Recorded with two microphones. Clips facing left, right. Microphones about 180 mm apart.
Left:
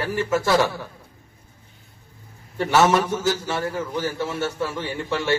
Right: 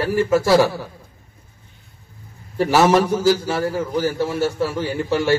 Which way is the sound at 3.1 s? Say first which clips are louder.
Right 6 dB; 35° right (ahead or behind).